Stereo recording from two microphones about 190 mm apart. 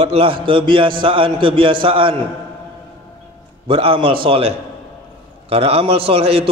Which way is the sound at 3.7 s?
30° right (ahead or behind).